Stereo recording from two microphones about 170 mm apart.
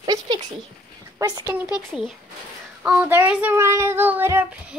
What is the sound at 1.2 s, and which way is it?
Speech, 20° right (ahead or behind).